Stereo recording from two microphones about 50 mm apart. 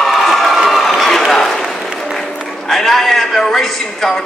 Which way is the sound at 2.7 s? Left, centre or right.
Centre.